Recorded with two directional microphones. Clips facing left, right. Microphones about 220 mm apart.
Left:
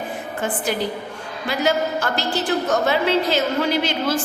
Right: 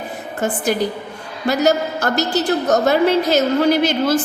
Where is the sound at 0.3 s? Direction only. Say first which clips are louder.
Right 5 dB; 45° right (ahead or behind).